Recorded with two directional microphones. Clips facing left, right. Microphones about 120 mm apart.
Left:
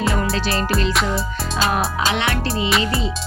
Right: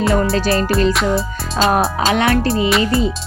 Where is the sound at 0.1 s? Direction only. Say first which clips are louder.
Right 6 dB; 35° right (ahead or behind).